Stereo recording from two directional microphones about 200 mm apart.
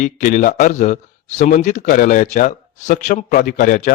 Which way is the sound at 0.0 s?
40° left (ahead or behind).